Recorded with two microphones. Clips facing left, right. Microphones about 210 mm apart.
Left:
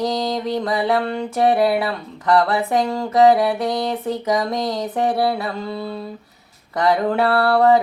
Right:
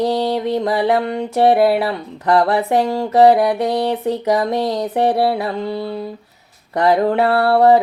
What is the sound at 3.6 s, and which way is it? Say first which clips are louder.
Speech: right 4 dB; 30° right (ahead or behind).